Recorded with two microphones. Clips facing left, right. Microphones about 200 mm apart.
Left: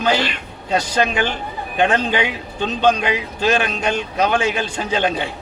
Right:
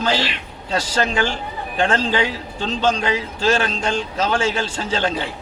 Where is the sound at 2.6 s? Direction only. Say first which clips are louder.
Left 3 dB; 60° left (ahead or behind).